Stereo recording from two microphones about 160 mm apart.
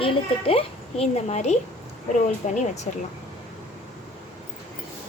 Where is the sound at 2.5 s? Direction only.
45° left (ahead or behind).